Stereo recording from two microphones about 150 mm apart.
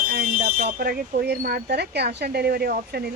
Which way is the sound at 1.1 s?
85° right.